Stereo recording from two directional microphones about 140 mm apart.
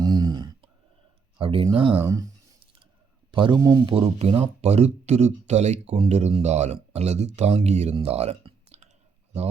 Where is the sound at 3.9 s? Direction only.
45° right (ahead or behind).